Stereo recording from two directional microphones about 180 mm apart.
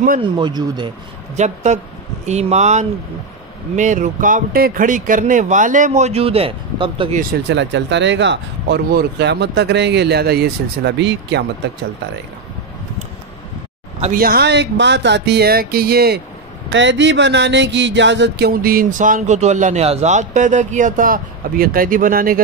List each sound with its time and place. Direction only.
0.4 s speech: 25° right (ahead or behind)
1.3 s speech: 40° right (ahead or behind)
7.4 s speech: 80° right
14.1 s speech: 55° right (ahead or behind)
16.6 s speech: 90° right; by 22.4 s 50° right (ahead or behind)